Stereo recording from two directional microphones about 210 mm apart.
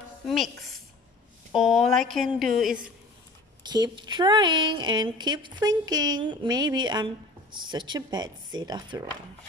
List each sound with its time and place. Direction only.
1.5 s speech: centre (ahead or behind)
3.6 s speech: 20° right (ahead or behind)